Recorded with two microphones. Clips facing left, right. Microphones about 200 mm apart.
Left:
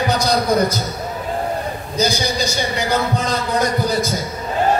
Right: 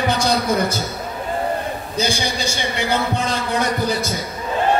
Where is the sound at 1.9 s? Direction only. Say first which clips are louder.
Left 3 dB; 40° left (ahead or behind).